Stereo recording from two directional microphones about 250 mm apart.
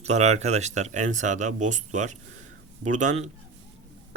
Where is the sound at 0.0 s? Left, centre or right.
Right.